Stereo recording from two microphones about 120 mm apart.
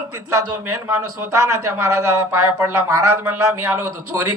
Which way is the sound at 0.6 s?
20° right (ahead or behind).